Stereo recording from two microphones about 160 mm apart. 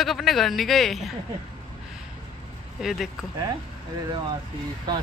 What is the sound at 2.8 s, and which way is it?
Speech, centre (ahead or behind).